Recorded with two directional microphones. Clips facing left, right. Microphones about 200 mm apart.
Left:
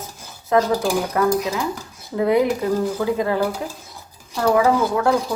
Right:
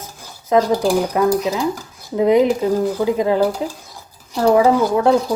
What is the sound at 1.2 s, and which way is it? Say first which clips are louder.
A woman's voice: right 3 dB; 20° right (ahead or behind).